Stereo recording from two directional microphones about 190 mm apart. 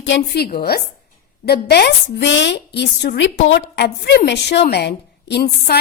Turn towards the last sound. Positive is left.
turn(degrees=60)  # may be behind; listen again after turning